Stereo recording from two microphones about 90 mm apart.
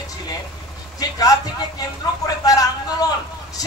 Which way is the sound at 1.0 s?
40° left (ahead or behind).